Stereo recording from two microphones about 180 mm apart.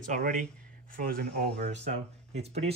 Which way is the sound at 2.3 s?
35° right (ahead or behind).